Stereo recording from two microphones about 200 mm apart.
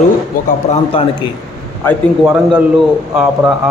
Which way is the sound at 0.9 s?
25° left (ahead or behind).